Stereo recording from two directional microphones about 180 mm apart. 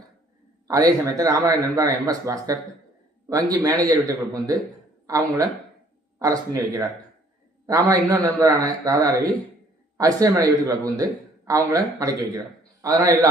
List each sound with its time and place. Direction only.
0.7 s a man's voice: 20° right (ahead or behind)